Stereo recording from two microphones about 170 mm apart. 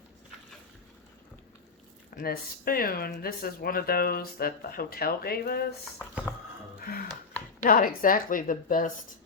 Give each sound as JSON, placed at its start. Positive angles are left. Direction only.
{"t": 2.1, "sound": "speech", "side_deg": 60}
{"t": 6.7, "sound": "a sound", "side_deg": 60}
{"t": 7.6, "sound": "a woman's voice", "side_deg": 55}